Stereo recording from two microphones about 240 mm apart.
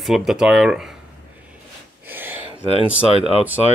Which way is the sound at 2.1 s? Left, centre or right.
Centre.